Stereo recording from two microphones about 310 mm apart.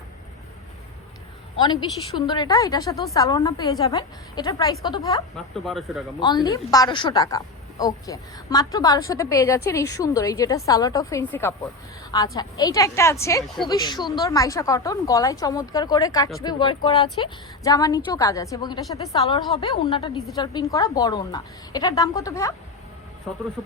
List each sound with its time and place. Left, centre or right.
1.6 s a woman's voice: centre
5.5 s speech: centre
6.1 s a woman's voice: centre